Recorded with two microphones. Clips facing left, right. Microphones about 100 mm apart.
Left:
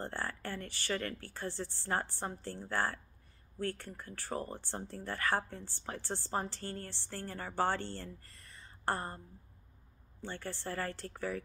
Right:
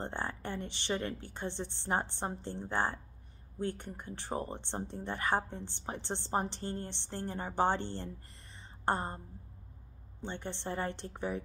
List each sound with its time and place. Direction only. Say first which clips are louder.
0.0 s speech: right 2 dB; 20° right (ahead or behind)
10.2 s speech: right 2 dB; 20° right (ahead or behind)